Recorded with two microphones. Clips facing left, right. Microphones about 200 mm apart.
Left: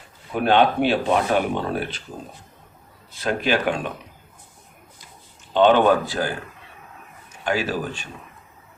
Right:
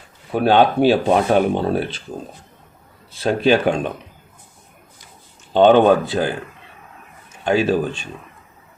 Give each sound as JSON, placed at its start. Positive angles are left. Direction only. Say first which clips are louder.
{"t": 0.3, "sound": "speech", "louder": "right 3 dB", "side_deg": -35}
{"t": 3.2, "sound": "speech", "louder": "right 6 dB", "side_deg": -30}
{"t": 5.7, "sound": "speech", "louder": "right 4 dB", "side_deg": -25}
{"t": 7.4, "sound": "speech", "louder": "right 7 dB", "side_deg": -25}